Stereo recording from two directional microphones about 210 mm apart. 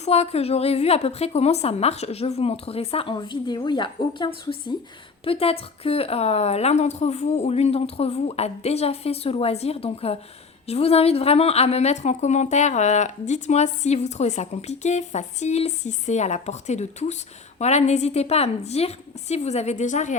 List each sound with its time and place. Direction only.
0.0 s a woman's voice: 30° left (ahead or behind)